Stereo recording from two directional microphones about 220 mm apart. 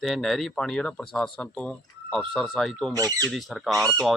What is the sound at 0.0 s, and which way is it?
Speech, centre (ahead or behind).